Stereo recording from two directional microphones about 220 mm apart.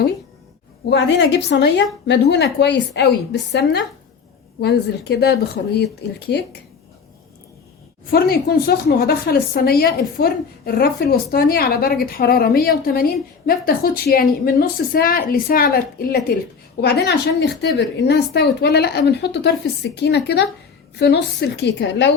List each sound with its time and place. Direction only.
0.9 s a woman's voice: 50° left (ahead or behind)
8.1 s a woman's voice: 45° left (ahead or behind)